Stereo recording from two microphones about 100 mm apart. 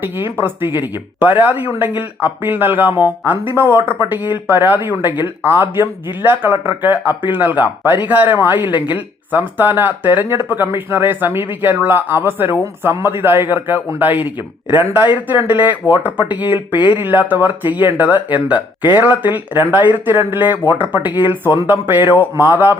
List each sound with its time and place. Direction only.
0.3 s speech: 20° right (ahead or behind)